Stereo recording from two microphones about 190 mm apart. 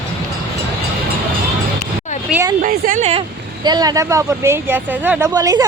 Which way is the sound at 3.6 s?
20° right (ahead or behind).